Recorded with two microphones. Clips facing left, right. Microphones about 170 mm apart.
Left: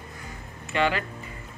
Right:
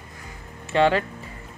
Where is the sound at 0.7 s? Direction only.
30° right (ahead or behind).